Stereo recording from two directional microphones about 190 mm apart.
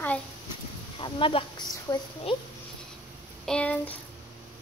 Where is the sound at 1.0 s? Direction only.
25° left (ahead or behind).